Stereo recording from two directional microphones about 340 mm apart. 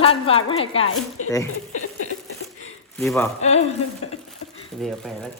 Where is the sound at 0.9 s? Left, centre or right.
Left.